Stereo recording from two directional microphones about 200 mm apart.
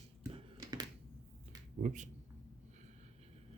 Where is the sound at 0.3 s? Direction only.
25° right (ahead or behind).